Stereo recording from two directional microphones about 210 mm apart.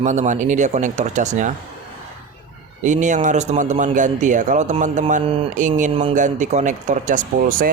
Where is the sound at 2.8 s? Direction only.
35° right (ahead or behind).